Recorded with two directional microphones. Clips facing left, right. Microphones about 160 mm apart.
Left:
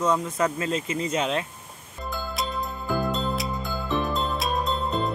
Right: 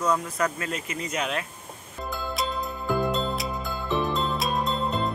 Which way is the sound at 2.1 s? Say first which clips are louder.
Even; centre (ahead or behind).